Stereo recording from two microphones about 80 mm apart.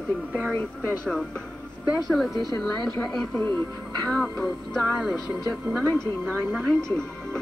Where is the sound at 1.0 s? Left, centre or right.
Centre.